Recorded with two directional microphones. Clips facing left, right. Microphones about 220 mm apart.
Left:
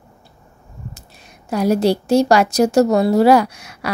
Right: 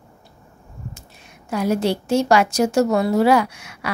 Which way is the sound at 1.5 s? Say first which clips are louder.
Left 4 dB; 40° left (ahead or behind).